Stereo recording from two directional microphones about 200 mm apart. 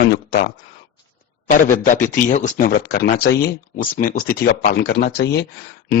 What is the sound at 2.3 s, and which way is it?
Speech, 40° left (ahead or behind).